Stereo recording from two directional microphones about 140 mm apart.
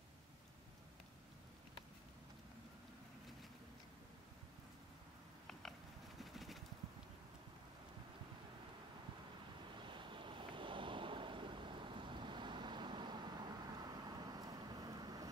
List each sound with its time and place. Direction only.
5.5 s biting: 5° left (ahead or behind)
6.3 s a sound: centre (ahead or behind)
9.8 s waves: 35° right (ahead or behind)